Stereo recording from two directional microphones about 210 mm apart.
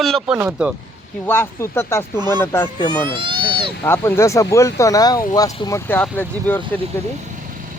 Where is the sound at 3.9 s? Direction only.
10° left (ahead or behind).